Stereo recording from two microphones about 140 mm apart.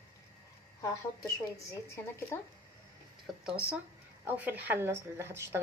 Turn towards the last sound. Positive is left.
turn(degrees=-20)  # may be behind; listen again after turning